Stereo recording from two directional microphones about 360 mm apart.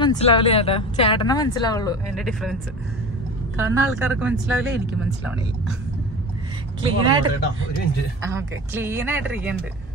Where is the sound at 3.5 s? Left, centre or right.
Centre.